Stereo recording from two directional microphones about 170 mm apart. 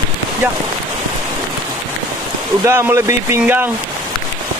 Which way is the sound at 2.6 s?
15° right (ahead or behind).